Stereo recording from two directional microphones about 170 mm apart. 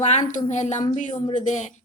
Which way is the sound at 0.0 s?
40° left (ahead or behind).